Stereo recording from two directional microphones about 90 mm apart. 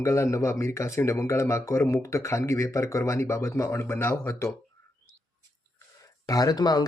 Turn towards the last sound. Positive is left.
turn(degrees=50)  # may be behind; listen again after turning